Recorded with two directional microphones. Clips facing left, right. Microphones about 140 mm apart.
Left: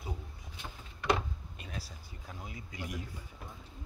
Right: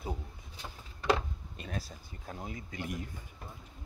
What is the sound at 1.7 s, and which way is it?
Speech, 50° right (ahead or behind).